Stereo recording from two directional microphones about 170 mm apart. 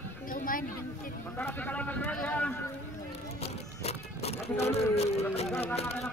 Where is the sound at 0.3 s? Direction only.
55° left (ahead or behind).